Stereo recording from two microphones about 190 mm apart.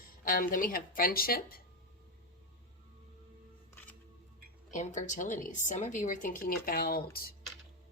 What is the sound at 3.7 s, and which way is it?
Music, 10° left (ahead or behind).